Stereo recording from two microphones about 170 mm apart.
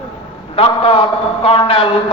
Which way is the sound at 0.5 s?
35° left (ahead or behind).